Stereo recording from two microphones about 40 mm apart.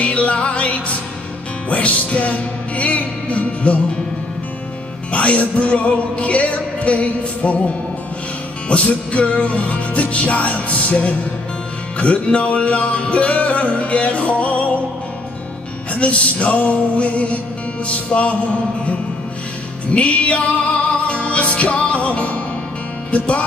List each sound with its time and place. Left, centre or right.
0.0 s music: left
5.1 s music: left
15.9 s music: left